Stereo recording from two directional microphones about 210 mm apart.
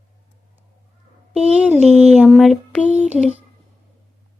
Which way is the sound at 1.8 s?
30° right (ahead or behind).